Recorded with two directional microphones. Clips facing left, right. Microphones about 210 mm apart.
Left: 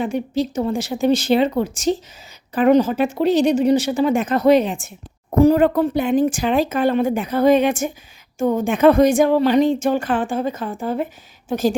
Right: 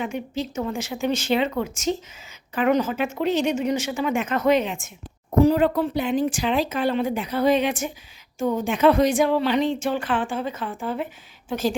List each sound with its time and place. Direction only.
0.0 s speech: 35° left (ahead or behind)
5.4 s a woman's voice: 50° left (ahead or behind)